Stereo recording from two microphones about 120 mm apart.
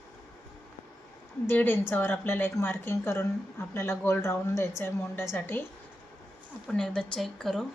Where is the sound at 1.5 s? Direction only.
15° left (ahead or behind).